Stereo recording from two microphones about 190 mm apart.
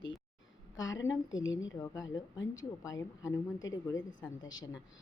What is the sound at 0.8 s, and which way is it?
Speech, 85° left.